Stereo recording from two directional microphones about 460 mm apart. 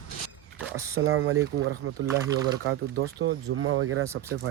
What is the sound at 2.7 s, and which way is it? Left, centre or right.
Speech, right.